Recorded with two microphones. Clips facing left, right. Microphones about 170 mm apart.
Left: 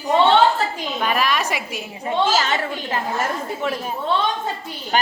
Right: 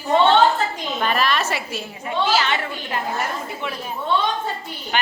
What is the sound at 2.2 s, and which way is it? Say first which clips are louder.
A woman's voice: even; 45° left (ahead or behind).